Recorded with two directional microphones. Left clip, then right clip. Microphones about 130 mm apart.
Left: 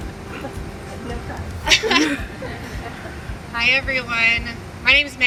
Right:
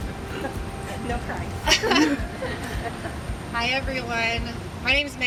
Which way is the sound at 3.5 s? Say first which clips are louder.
Left 7 dB; 20° left (ahead or behind).